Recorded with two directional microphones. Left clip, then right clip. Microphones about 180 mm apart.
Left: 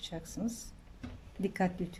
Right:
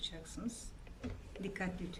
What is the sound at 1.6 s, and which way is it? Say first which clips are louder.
Speech: left 10 dB; 30° left (ahead or behind).